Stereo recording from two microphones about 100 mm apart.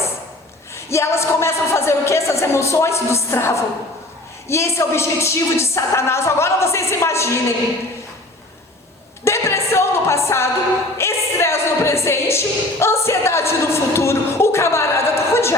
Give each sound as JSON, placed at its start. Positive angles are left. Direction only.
{"t": 0.9, "sound": "a woman's voice", "side_deg": 25}
{"t": 9.2, "sound": "music", "side_deg": 25}